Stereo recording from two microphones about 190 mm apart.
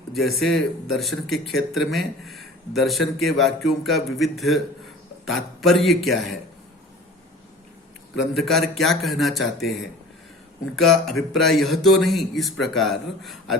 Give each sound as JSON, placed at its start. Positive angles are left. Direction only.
{"t": 0.1, "sound": "speech", "side_deg": 0}
{"t": 8.4, "sound": "speech", "side_deg": 0}
{"t": 10.8, "sound": "speech", "side_deg": 0}